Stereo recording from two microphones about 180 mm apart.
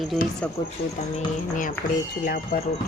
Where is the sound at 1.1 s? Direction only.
45° left (ahead or behind).